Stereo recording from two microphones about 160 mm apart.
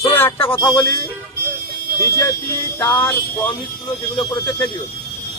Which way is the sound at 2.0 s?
20° left (ahead or behind).